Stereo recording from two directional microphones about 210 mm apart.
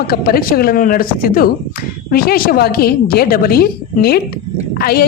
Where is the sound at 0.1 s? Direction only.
45° left (ahead or behind).